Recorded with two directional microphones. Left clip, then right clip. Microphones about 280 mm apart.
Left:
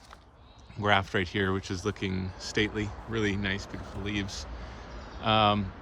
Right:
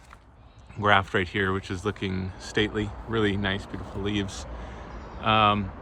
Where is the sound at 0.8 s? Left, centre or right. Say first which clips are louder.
Right 4 dB; centre.